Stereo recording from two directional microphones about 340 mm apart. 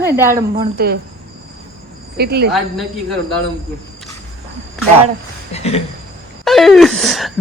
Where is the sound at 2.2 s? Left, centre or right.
Right.